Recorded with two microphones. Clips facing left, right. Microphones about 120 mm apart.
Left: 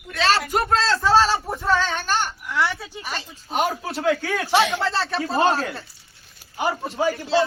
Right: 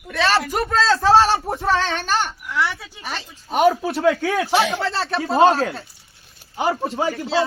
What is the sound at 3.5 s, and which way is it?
Speech, 70° right (ahead or behind).